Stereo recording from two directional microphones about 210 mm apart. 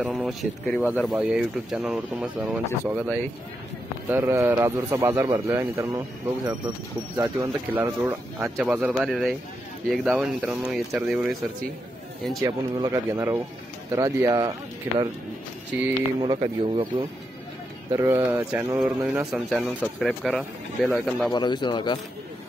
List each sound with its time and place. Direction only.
0.0 s a man's voice: centre (ahead or behind)
4.1 s a man's voice: 10° right (ahead or behind)
12.4 s speech: 20° right (ahead or behind)
16.2 s speech: 20° right (ahead or behind)
17.9 s a man's voice: 10° right (ahead or behind)
21.3 s a man's voice: 20° left (ahead or behind)